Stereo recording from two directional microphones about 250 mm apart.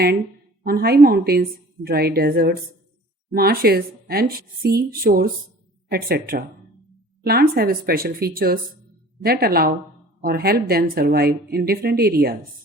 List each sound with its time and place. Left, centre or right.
0.6 s a woman's voice: right